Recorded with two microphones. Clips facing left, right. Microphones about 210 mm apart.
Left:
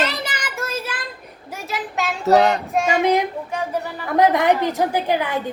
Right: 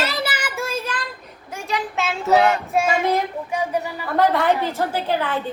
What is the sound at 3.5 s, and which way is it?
Speech, 10° right (ahead or behind).